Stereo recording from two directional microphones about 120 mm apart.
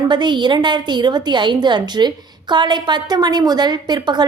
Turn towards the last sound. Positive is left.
turn(degrees=-35)  # may be behind; listen again after turning